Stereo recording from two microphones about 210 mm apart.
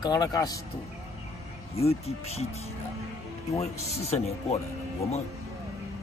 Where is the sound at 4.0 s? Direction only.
30° left (ahead or behind).